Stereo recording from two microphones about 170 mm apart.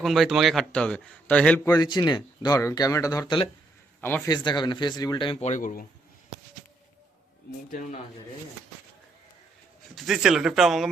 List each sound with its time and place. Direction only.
0.0 s a man's voice: centre (ahead or behind)
1.6 s speech: 25° left (ahead or behind); by 5.8 s 50° left (ahead or behind)
7.7 s speech: 50° left (ahead or behind)
9.9 s a man's voice: centre (ahead or behind)